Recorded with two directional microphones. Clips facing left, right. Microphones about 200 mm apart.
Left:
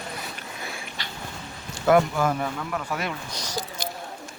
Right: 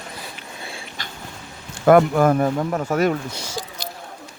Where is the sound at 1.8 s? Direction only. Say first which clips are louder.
Right 6 dB; 55° right (ahead or behind).